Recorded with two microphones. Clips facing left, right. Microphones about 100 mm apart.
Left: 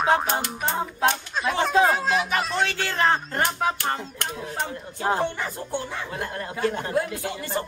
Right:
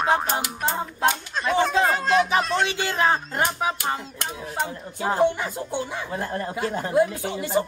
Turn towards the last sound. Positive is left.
turn(degrees=-15)  # may be behind; listen again after turning